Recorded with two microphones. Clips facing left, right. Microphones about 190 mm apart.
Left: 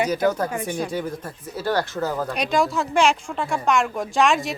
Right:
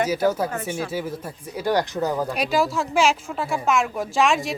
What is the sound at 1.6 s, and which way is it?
Speech, 15° right (ahead or behind).